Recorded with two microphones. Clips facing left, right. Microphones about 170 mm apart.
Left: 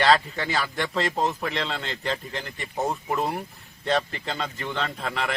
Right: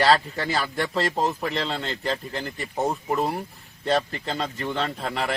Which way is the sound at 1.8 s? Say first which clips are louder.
Right 2 dB; 35° right (ahead or behind).